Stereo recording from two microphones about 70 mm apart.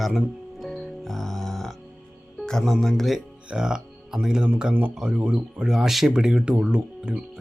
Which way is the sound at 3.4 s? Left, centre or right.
Centre.